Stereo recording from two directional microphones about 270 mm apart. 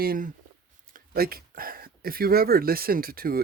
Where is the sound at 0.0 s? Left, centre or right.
Right.